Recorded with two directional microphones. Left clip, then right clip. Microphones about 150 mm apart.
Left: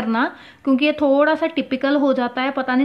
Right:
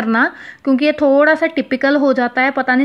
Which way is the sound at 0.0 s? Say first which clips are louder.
Right 6 dB; 25° right (ahead or behind).